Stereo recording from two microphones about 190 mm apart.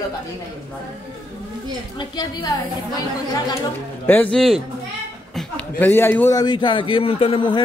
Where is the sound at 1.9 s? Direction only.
25° left (ahead or behind).